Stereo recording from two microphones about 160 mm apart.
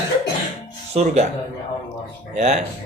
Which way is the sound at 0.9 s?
40° right (ahead or behind).